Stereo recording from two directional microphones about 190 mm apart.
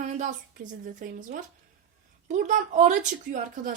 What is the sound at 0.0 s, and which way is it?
Speech, 40° right (ahead or behind).